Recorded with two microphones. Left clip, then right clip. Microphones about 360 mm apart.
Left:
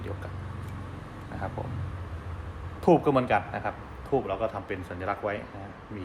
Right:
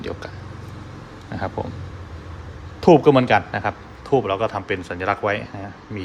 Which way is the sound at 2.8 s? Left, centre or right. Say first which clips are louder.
Right 9 dB; right.